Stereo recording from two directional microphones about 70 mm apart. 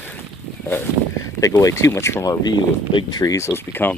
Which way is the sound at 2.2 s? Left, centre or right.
Left.